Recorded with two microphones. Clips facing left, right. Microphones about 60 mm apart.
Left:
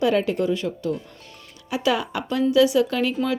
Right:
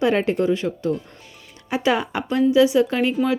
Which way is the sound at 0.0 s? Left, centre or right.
Right.